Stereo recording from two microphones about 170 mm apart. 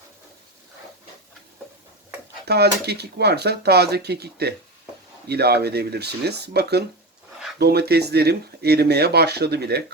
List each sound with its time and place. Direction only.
2.5 s speech: 75° right (ahead or behind)